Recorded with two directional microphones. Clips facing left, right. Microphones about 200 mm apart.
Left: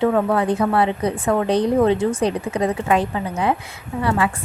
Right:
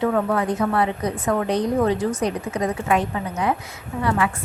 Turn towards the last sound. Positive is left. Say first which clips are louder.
# left 2 dB
turn(degrees=25)  # may be behind; listen again after turning